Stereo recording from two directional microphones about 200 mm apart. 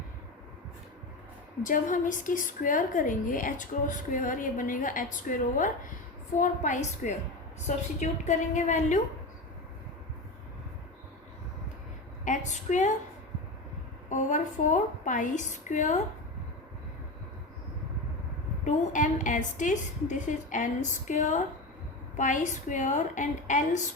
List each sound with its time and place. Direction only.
1.6 s a woman's voice: 40° left (ahead or behind)
12.2 s a woman's voice: 40° left (ahead or behind)
14.1 s a woman's voice: 40° left (ahead or behind)
18.6 s a woman's voice: 40° left (ahead or behind)